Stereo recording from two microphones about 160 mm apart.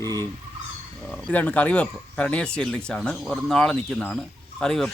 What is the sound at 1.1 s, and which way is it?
Speech, centre (ahead or behind).